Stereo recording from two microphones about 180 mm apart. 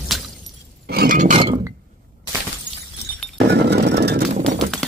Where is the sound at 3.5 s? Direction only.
70° right (ahead or behind).